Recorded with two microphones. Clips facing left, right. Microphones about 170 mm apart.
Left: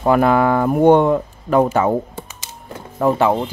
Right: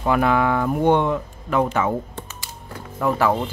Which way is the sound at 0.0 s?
40° left (ahead or behind).